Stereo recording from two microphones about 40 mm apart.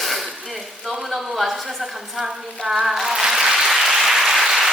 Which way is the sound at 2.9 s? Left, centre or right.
Centre.